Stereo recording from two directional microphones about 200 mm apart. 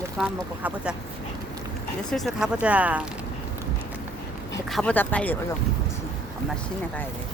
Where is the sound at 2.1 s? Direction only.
Centre (ahead or behind).